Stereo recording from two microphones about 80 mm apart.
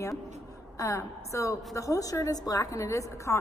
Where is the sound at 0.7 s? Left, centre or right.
Left.